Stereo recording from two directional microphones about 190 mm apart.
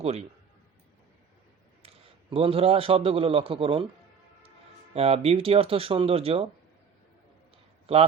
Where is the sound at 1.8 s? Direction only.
30° right (ahead or behind).